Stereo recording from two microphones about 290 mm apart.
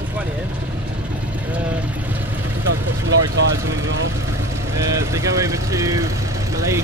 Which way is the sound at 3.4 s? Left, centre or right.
Right.